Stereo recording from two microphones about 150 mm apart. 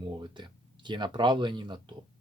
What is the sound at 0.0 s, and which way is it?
Speech, 30° right (ahead or behind).